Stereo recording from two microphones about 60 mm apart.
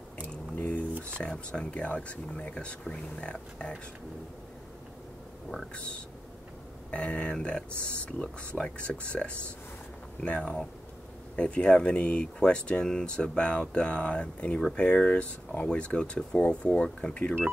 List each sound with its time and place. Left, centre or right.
0.3 s a sound: left
1.2 s speech: centre
6.9 s speech: centre
7.7 s speech: right
8.0 s speech: centre